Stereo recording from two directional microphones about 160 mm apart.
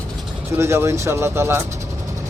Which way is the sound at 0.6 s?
15° right (ahead or behind).